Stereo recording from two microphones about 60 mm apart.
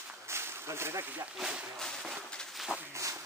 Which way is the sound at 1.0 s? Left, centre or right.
Right.